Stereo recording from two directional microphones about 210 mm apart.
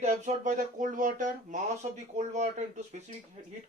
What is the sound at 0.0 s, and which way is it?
Speech, 35° right (ahead or behind).